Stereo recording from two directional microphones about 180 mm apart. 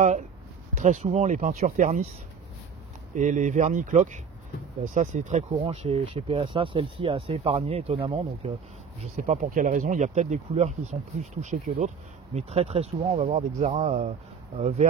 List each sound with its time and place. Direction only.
0.7 s speech: 40° right (ahead or behind)
3.2 s speech: 45° right (ahead or behind)